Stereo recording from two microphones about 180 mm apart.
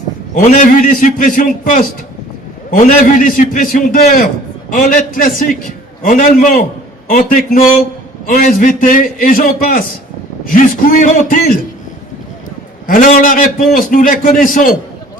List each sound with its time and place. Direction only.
0.3 s a man's voice: 50° left (ahead or behind)
12.9 s a man's voice: 50° left (ahead or behind)